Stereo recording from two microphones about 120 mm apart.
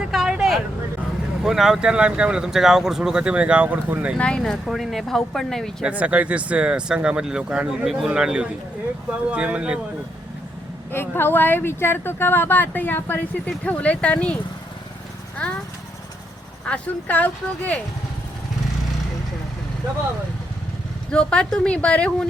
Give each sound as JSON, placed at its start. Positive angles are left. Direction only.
{"t": 0.0, "sound": "vehicle", "side_deg": -5}
{"t": 1.4, "sound": "speech", "side_deg": -5}
{"t": 4.2, "sound": "speech", "side_deg": 5}
{"t": 5.8, "sound": "speech", "side_deg": -10}
{"t": 10.9, "sound": "speech", "side_deg": 20}
{"t": 16.6, "sound": "speech", "side_deg": 10}
{"t": 21.1, "sound": "speech", "side_deg": 10}